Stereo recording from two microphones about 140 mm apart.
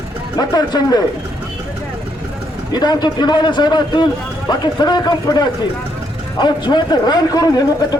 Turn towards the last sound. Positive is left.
turn(degrees=25)  # may be behind; listen again after turning